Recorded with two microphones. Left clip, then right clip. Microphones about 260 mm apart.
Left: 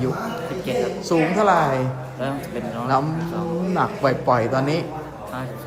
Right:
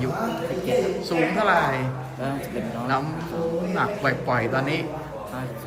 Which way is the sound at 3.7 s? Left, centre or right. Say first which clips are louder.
Left 5 dB; centre.